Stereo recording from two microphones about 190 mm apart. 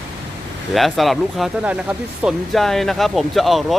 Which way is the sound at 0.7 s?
Centre (ahead or behind).